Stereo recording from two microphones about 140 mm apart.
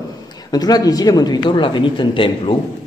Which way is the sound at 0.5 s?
30° left (ahead or behind).